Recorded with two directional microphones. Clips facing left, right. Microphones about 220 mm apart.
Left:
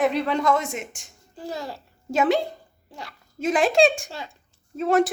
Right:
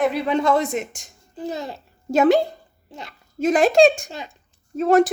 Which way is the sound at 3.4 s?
40° right (ahead or behind).